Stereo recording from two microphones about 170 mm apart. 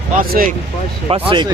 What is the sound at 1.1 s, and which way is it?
Speech, 30° right (ahead or behind).